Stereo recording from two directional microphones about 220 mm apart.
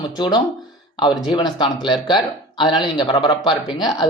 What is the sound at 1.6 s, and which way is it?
A man's voice, 20° left (ahead or behind).